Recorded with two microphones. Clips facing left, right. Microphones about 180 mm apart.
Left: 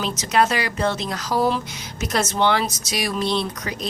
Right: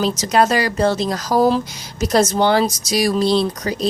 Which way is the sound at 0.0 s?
35° right (ahead or behind).